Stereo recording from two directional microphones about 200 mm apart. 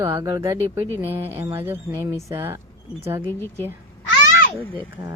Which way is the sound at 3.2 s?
10° left (ahead or behind).